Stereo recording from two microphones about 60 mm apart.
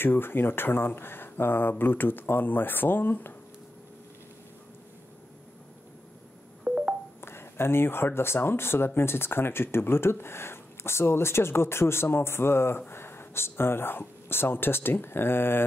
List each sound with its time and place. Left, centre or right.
0.0 s speech: left
6.6 s telephone dialing: centre
7.2 s speech: left